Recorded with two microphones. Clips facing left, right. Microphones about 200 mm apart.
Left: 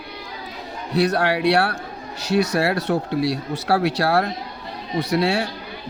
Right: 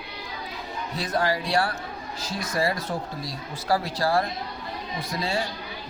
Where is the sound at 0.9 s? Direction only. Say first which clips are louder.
Left 7 dB; 70° left (ahead or behind).